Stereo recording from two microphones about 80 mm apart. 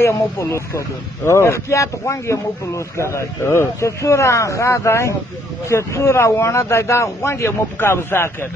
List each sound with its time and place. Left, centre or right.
0.0 s speech: left